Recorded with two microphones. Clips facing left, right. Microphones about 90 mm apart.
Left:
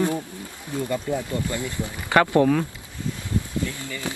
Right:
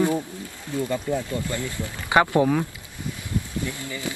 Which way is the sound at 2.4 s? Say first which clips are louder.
Left 2 dB; 10° right (ahead or behind).